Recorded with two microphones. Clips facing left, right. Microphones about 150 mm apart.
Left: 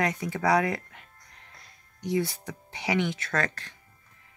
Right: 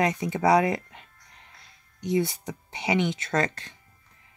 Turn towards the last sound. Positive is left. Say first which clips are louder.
# right 3 dB
turn(degrees=-20)  # may be behind; listen again after turning